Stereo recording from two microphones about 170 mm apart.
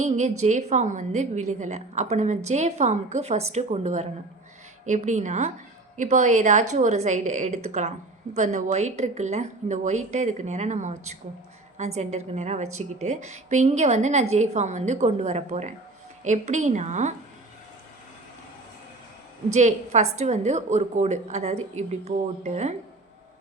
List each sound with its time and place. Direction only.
0.0 s a woman's voice: 45° right (ahead or behind)
19.5 s a woman's voice: 45° right (ahead or behind)